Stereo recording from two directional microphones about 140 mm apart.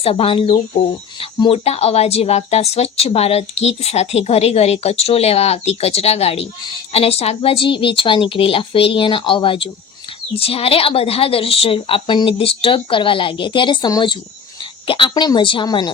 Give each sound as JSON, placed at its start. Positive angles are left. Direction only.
{"t": 0.0, "sound": "a woman's voice", "side_deg": 45}